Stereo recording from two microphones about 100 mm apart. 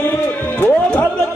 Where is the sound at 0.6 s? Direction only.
20° left (ahead or behind).